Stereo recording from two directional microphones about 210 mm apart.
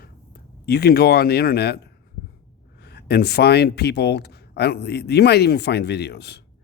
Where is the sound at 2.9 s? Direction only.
50° left (ahead or behind).